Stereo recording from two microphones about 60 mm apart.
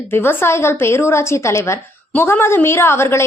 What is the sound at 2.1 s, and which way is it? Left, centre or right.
A woman's voice, left.